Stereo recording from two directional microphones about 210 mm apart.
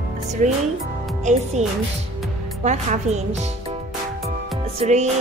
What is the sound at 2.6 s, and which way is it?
Speech, 35° right (ahead or behind).